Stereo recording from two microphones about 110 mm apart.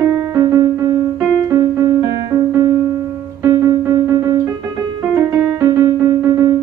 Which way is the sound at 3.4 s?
30° right (ahead or behind).